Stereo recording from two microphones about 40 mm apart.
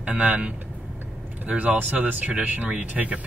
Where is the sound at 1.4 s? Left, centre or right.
Right.